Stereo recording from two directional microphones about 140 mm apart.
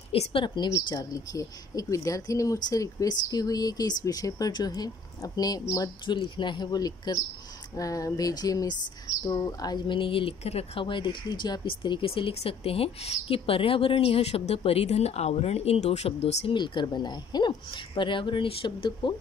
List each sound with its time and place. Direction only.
0.1 s speech: 40° left (ahead or behind)
0.7 s a woman's voice: 25° left (ahead or behind); by 16.5 s 45° left (ahead or behind)
16.5 s speech: 35° left (ahead or behind)